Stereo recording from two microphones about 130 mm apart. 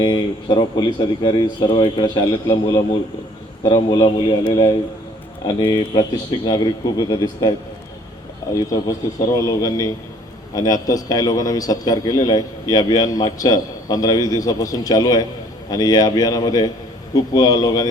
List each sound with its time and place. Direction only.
0.0 s speech: 40° left (ahead or behind)
3.9 s speech: 35° left (ahead or behind)
8.5 s a man's voice: 25° left (ahead or behind)